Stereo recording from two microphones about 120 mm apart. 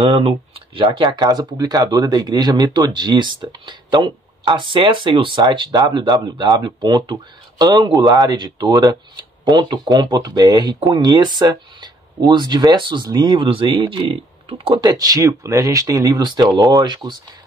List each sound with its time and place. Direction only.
0.0 s speech: 50° right (ahead or behind)
14.8 s speech: 30° right (ahead or behind)